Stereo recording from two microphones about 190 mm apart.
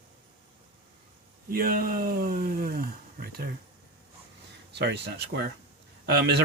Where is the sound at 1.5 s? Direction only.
50° right (ahead or behind).